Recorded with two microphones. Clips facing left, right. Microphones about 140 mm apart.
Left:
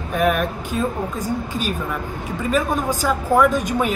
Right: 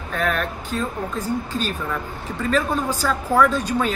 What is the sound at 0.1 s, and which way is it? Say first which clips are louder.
Speech: left 4 dB; 15° left (ahead or behind).